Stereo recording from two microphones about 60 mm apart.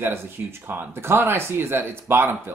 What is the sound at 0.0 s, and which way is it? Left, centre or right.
Speech, right.